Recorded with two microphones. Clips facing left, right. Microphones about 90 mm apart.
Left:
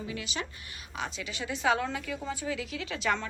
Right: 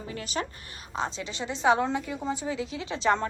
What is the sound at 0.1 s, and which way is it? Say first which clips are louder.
Speech: right 7 dB; 40° right (ahead or behind).